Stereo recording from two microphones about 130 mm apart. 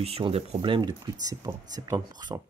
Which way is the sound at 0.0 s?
50° right (ahead or behind).